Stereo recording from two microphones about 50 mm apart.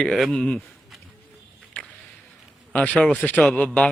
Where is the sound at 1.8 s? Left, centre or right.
Left.